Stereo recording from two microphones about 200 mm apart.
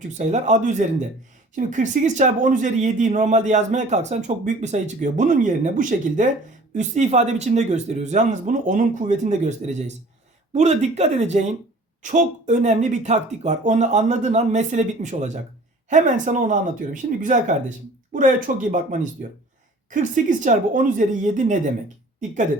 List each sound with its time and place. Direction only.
0.1 s speech: 35° right (ahead or behind)